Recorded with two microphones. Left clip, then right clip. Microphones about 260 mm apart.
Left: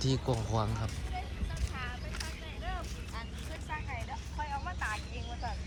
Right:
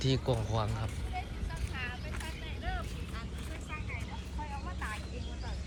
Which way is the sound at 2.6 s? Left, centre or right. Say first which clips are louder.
Right 1 dB; left.